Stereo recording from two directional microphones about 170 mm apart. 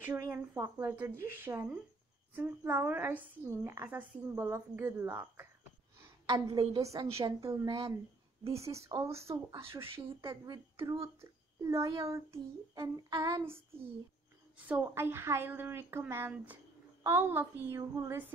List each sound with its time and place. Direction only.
0.0 s a woman's voice: 15° right (ahead or behind)
9.2 s a child's voice: 30° right (ahead or behind)
9.6 s a woman's voice: 15° right (ahead or behind)
14.7 s a woman's voice: 15° right (ahead or behind)